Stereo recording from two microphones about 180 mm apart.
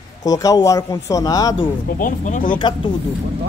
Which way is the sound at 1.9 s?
45° left (ahead or behind).